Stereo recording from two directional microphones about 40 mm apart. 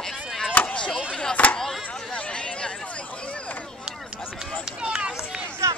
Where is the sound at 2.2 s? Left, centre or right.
Left.